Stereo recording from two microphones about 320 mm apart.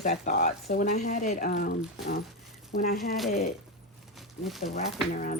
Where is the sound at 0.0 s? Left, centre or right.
Left.